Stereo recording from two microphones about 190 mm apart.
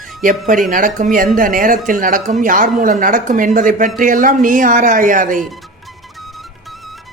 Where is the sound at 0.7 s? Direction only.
45° right (ahead or behind).